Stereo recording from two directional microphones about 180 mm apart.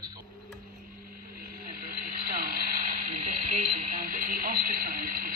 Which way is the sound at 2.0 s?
50° right (ahead or behind).